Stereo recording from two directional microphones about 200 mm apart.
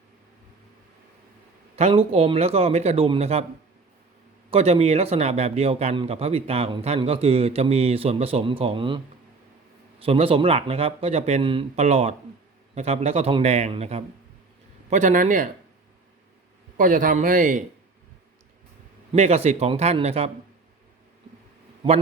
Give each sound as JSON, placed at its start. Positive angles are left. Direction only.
{"t": 1.7, "sound": "a man's voice", "side_deg": -30}
{"t": 4.5, "sound": "a man's voice", "side_deg": -30}
{"t": 10.0, "sound": "a man's voice", "side_deg": -30}
{"t": 16.7, "sound": "a man's voice", "side_deg": -40}
{"t": 19.1, "sound": "a man's voice", "side_deg": -30}
{"t": 21.8, "sound": "speech", "side_deg": -25}